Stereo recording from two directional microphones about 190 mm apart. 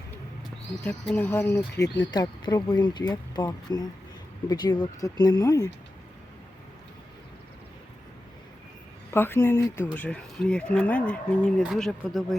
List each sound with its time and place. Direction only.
0.9 s speech: 10° left (ahead or behind)
9.1 s speech: 10° left (ahead or behind)